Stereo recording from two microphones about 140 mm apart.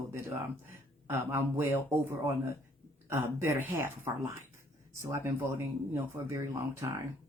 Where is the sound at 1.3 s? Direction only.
20° right (ahead or behind).